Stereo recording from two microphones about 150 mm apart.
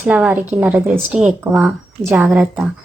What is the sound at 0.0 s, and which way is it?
A woman's voice, 10° right (ahead or behind).